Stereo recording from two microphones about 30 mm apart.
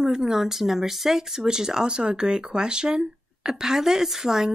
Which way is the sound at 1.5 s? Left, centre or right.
Centre.